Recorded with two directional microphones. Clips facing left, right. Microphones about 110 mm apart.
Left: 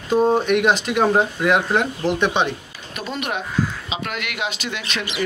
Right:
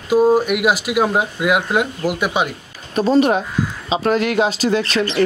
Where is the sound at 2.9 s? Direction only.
35° right (ahead or behind).